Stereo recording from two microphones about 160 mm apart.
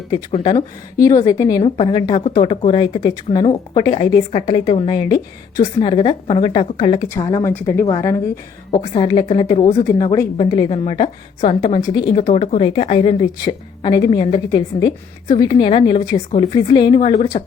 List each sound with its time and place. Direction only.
0.3 s speech: 35° left (ahead or behind)
0.9 s a woman's voice: 20° left (ahead or behind)
1.6 s speech: 35° left (ahead or behind)
7.0 s a woman's voice: 20° left (ahead or behind)
9.0 s speech: 30° left (ahead or behind)
9.8 s a woman's voice: 20° left (ahead or behind)
12.3 s speech: 40° left (ahead or behind)
13.4 s a woman's voice: 25° left (ahead or behind)